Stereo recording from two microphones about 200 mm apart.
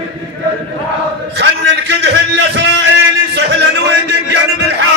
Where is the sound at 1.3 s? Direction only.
60° right (ahead or behind).